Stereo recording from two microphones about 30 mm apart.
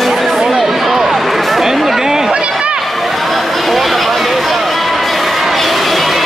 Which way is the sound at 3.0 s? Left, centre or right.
Centre.